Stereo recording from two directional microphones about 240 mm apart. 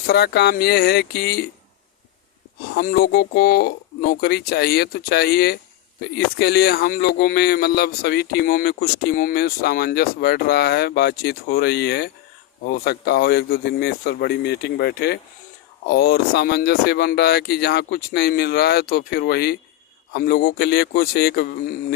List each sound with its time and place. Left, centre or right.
0.1 s speech: left
2.7 s speech: left